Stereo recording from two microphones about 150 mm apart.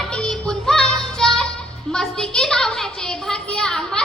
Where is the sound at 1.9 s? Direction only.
5° left (ahead or behind).